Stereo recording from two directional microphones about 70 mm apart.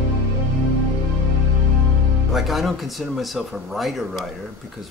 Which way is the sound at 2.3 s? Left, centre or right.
Centre.